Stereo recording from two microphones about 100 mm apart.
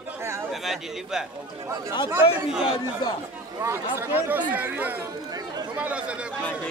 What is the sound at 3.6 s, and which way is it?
Speech, 25° right (ahead or behind).